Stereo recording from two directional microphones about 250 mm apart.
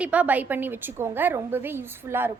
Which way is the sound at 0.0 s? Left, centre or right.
Centre.